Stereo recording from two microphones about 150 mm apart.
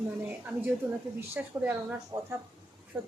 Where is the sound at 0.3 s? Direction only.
10° right (ahead or behind).